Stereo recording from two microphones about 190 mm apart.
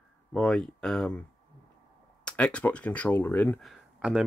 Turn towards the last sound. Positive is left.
turn(degrees=0)  # may be behind; listen again after turning